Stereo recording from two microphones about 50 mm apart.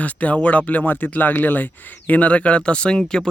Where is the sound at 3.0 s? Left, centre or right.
Centre.